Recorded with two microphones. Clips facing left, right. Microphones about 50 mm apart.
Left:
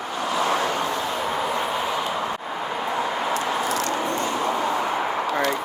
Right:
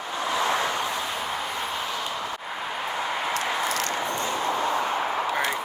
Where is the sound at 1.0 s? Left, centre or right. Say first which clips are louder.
Left 5 dB; centre.